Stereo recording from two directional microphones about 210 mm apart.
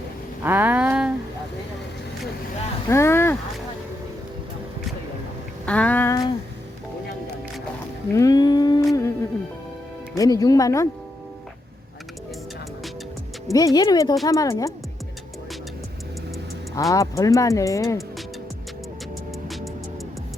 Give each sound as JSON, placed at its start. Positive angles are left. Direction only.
{"t": 0.4, "sound": "a sound", "side_deg": -10}
{"t": 2.9, "sound": "a sound", "side_deg": 10}
{"t": 5.6, "sound": "speech", "side_deg": 5}
{"t": 8.1, "sound": "music", "side_deg": 15}
{"t": 10.2, "sound": "speech", "side_deg": 15}
{"t": 13.5, "sound": "speech", "side_deg": 15}
{"t": 16.7, "sound": "speech", "side_deg": 15}
{"t": 19.5, "sound": "music", "side_deg": 0}